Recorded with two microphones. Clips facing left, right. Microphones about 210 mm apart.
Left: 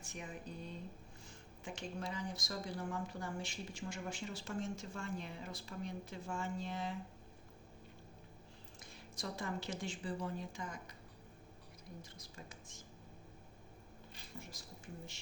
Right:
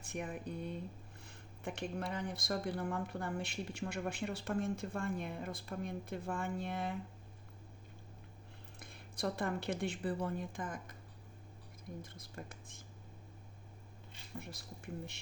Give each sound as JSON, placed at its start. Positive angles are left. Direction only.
{"t": 0.0, "sound": "speech", "side_deg": -60}
{"t": 8.8, "sound": "speech", "side_deg": -60}
{"t": 12.1, "sound": "speech", "side_deg": -55}
{"t": 14.3, "sound": "speech", "side_deg": -60}